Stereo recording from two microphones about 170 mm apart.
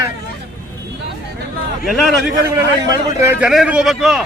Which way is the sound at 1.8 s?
Centre (ahead or behind).